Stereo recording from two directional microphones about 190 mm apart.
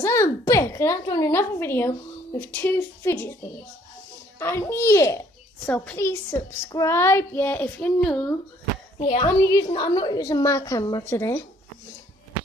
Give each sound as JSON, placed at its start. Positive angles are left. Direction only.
{"t": 0.0, "sound": "a woman's voice", "side_deg": 15}
{"t": 4.4, "sound": "a woman's voice", "side_deg": 15}
{"t": 8.9, "sound": "speech", "side_deg": 35}
{"t": 9.2, "sound": "a woman's voice", "side_deg": 20}